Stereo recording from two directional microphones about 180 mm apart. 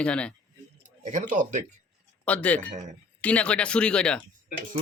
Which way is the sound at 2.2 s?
5° left (ahead or behind).